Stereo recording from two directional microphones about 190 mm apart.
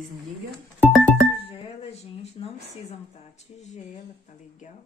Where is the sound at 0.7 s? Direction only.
10° right (ahead or behind).